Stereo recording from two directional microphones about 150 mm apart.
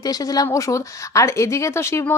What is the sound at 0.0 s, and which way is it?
A woman's voice, 25° left (ahead or behind).